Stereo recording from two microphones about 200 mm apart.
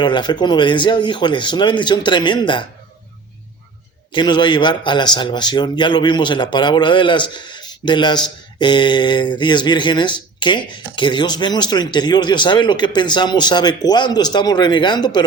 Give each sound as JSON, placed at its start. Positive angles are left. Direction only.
{"t": 0.0, "sound": "a man's voice", "side_deg": 20}
{"t": 4.1, "sound": "a man's voice", "side_deg": 20}